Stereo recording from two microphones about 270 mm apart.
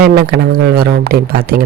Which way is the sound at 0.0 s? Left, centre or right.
Right.